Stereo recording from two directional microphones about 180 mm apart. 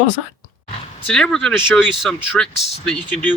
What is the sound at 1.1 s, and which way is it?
Speech, 5° left (ahead or behind).